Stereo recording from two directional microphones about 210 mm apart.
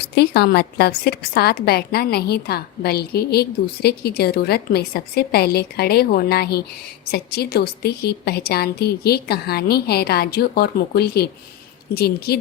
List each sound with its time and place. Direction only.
0.2 s a woman's voice: 50° left (ahead or behind)